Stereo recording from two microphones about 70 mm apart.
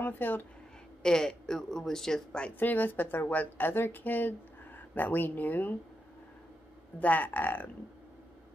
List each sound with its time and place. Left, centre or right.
0.0 s speech: left
1.0 s speech: centre
2.6 s speech: left
7.0 s speech: left